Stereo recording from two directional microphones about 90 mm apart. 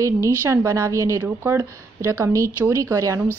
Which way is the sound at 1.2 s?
25° right (ahead or behind).